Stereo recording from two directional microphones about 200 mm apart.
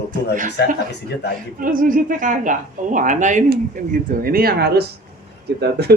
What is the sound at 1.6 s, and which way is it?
A woman's voice, 45° right (ahead or behind).